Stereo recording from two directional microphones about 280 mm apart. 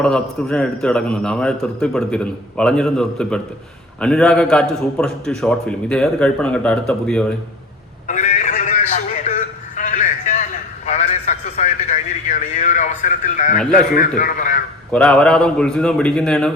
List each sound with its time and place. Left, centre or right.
0.0 s a man's voice: centre
8.0 s a sound: left
13.6 s a man's voice: centre
13.9 s a man's voice: left
14.9 s a man's voice: centre